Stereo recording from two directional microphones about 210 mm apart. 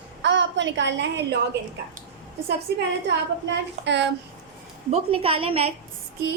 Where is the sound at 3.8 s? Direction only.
55° right (ahead or behind).